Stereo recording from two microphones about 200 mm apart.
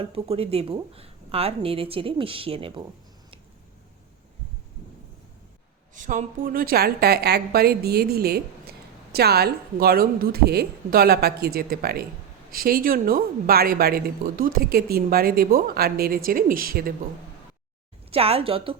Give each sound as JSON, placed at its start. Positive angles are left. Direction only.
{"t": 0.0, "sound": "speech", "side_deg": -30}
{"t": 5.9, "sound": "speech", "side_deg": -40}
{"t": 18.1, "sound": "speech", "side_deg": -30}